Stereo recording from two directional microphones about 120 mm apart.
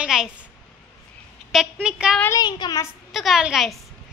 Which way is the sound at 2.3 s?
35° left (ahead or behind).